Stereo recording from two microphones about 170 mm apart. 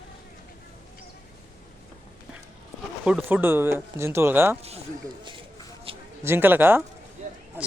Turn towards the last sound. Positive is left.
turn(degrees=-10)  # may be behind; listen again after turning